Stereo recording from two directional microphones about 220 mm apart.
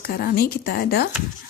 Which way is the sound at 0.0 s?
45° left (ahead or behind).